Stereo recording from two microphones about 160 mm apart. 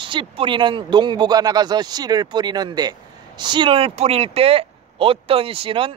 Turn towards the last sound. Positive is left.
turn(degrees=-35)  # may be behind; listen again after turning